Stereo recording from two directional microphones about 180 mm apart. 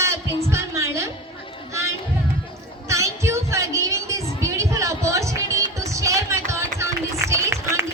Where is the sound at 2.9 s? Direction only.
15° right (ahead or behind).